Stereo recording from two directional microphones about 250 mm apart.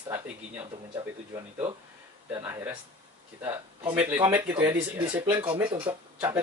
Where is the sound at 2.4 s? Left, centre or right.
Centre.